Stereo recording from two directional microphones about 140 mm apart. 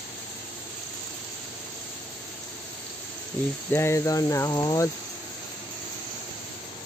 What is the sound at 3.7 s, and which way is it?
Speech, 20° left (ahead or behind).